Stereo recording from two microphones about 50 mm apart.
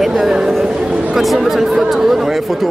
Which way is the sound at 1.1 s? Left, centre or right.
Centre.